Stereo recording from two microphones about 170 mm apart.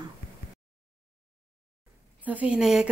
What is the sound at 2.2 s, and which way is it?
Speech, 5° right (ahead or behind).